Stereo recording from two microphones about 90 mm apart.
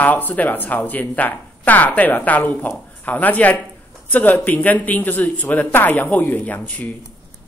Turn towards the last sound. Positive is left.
turn(degrees=20)  # may be behind; listen again after turning